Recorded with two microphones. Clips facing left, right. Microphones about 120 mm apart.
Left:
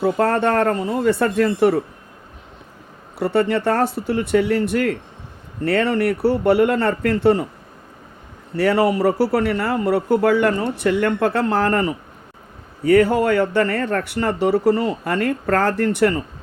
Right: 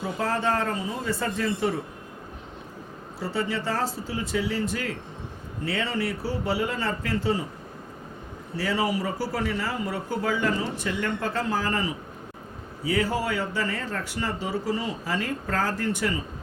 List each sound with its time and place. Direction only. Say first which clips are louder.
0.0 s speech: left 9 dB; 65° left (ahead or behind)
3.2 s speech: left 10 dB; 65° left (ahead or behind)
8.5 s speech: left 9 dB; 65° left (ahead or behind)